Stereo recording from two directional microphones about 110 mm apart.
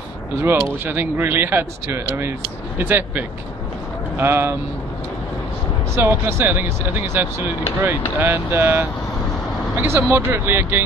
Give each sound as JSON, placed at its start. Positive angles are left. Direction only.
{"t": 0.4, "sound": "speech", "side_deg": -20}
{"t": 5.9, "sound": "speech", "side_deg": -20}